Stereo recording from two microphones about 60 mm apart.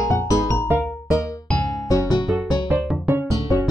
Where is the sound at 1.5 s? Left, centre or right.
Left.